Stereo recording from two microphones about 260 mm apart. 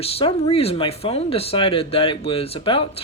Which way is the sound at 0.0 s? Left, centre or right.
Left.